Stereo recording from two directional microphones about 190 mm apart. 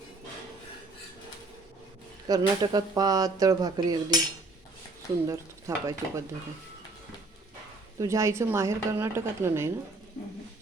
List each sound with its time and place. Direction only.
2.2 s speech: 20° right (ahead or behind)
5.2 s a woman's voice: 15° right (ahead or behind)
7.9 s a woman's voice: 15° right (ahead or behind)